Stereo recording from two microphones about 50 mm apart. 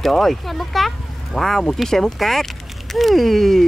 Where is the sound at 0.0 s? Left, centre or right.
Centre.